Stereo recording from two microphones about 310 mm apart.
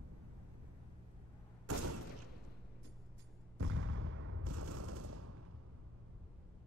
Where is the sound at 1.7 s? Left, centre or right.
Right.